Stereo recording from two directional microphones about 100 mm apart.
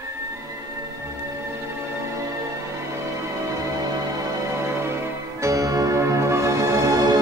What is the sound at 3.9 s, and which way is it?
Music, 35° right (ahead or behind).